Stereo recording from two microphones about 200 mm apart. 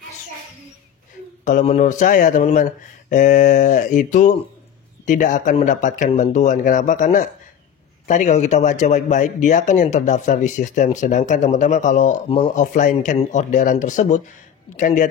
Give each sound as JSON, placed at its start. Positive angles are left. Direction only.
{"t": 1.4, "sound": "speech", "side_deg": 40}